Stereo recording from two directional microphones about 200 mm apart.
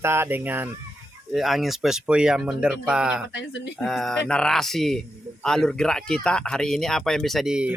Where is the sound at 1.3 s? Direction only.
Centre (ahead or behind).